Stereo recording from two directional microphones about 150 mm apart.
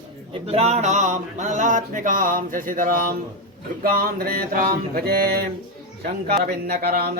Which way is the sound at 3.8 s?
80° right.